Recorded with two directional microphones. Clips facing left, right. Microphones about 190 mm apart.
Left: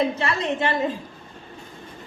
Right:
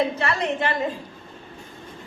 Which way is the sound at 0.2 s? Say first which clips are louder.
Even; 20° left (ahead or behind).